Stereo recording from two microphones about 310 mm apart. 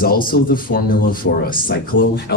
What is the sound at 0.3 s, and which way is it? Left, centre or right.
Speech, left.